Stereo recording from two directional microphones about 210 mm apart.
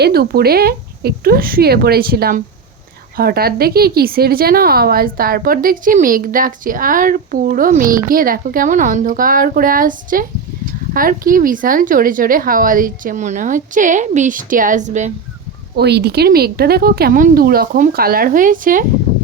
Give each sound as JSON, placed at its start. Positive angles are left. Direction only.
{"t": 0.0, "sound": "a woman's voice", "side_deg": -50}
{"t": 15.7, "sound": "speech", "side_deg": -50}